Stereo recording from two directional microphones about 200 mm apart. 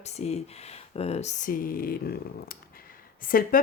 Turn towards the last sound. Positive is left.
turn(degrees=45)  # may be behind; listen again after turning